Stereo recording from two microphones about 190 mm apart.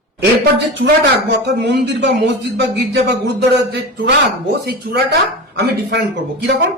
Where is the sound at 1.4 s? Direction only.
60° right (ahead or behind).